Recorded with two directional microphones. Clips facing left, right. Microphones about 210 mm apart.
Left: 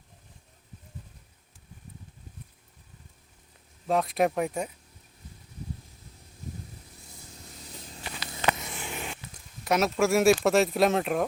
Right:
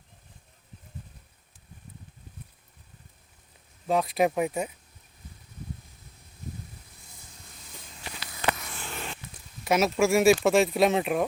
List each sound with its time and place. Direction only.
3.8 s speech: centre (ahead or behind)
7.6 s walk: 35° left (ahead or behind)
8.5 s a sound: 20° left (ahead or behind)
9.3 s speech: 5° right (ahead or behind)